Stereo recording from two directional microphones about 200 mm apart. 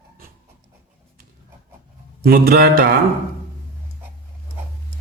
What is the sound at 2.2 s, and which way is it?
Speech, 50° right (ahead or behind).